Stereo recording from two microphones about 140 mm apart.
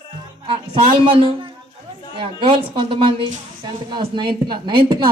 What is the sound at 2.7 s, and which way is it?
A woman's voice, 40° right (ahead or behind).